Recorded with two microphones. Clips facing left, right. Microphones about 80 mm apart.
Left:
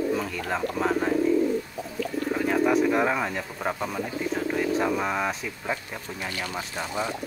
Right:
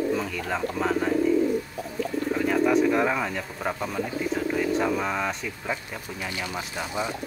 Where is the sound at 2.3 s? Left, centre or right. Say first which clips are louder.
Even; centre.